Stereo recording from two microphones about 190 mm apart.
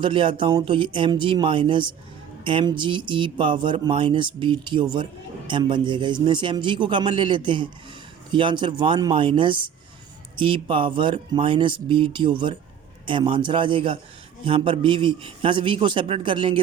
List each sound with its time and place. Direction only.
0.0 s speech: 25° right (ahead or behind)